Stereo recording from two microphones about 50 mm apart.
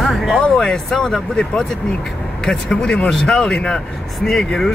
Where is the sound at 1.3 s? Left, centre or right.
Left.